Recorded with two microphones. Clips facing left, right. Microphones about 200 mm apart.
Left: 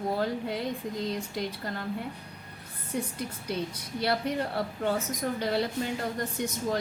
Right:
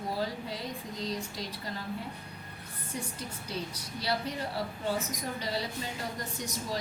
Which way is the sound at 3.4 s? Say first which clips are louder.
Left 5 dB; 60° left (ahead or behind).